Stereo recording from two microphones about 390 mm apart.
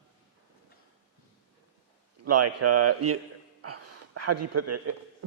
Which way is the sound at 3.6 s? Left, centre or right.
Right.